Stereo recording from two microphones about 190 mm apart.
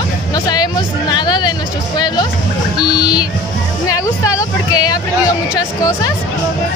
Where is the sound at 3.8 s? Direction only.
20° left (ahead or behind).